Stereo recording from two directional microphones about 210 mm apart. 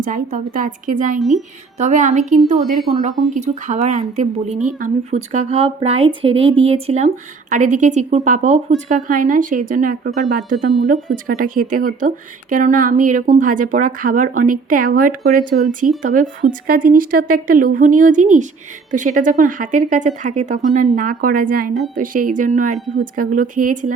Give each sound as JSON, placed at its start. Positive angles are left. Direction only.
{"t": 0.0, "sound": "speech", "side_deg": -40}